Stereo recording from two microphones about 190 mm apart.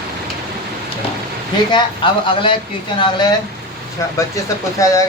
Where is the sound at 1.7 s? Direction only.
25° left (ahead or behind).